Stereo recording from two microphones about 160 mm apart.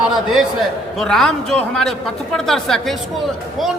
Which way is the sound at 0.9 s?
Centre (ahead or behind).